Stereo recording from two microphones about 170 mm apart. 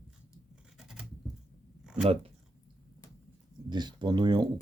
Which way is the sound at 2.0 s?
35° right (ahead or behind).